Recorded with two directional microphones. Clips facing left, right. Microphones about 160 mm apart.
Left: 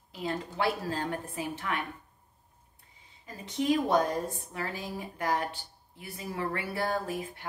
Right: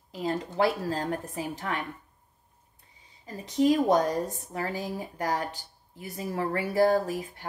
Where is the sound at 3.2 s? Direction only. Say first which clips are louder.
Right 7 dB; 40° right (ahead or behind).